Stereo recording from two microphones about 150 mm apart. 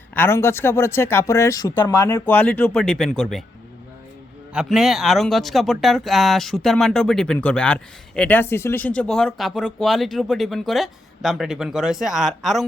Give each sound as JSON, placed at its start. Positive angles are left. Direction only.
{"t": 0.1, "sound": "speech", "side_deg": 15}
{"t": 4.5, "sound": "speech", "side_deg": 0}